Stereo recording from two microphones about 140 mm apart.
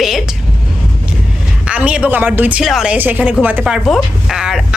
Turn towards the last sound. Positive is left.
turn(degrees=-5)  # may be behind; listen again after turning